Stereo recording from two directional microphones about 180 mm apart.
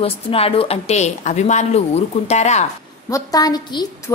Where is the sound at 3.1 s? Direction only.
20° left (ahead or behind).